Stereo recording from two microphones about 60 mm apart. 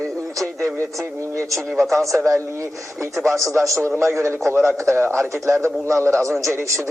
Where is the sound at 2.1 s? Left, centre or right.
Right.